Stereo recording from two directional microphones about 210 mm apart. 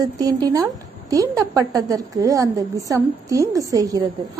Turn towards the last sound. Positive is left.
turn(degrees=-15)  # may be behind; listen again after turning